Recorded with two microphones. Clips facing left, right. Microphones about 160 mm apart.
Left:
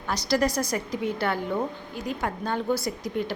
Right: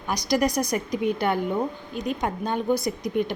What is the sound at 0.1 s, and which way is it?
A woman's voice, 15° right (ahead or behind).